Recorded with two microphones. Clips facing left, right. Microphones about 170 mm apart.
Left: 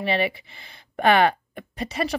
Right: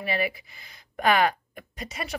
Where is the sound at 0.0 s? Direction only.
25° left (ahead or behind).